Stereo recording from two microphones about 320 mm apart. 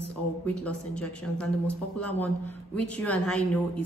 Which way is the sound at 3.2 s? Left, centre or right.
Centre.